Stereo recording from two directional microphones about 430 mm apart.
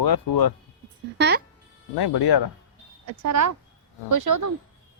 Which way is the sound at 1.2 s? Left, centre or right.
Right.